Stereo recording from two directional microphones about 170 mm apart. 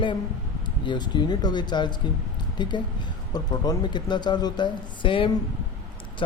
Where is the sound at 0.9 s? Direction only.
25° left (ahead or behind).